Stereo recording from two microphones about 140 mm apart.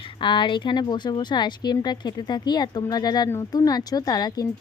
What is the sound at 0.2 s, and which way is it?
A woman's voice, 35° left (ahead or behind).